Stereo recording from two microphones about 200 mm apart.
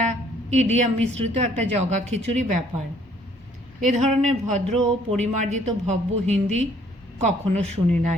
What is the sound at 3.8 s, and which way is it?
A woman's voice, 35° right (ahead or behind).